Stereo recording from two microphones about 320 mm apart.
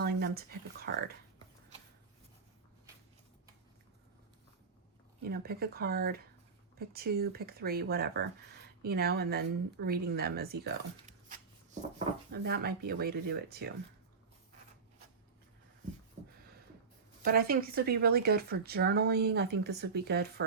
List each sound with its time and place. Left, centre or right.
0.0 s speech: right
5.2 s speech: right
17.2 s speech: right